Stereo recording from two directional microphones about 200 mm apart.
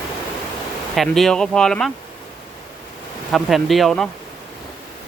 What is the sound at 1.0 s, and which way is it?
Speech, centre (ahead or behind).